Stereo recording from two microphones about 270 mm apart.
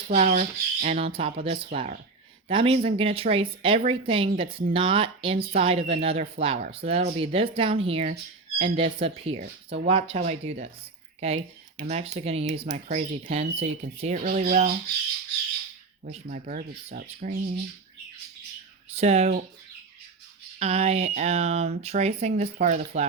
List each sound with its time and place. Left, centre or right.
0.1 s speech: right
16.0 s speech: right
18.9 s speech: right
20.6 s speech: right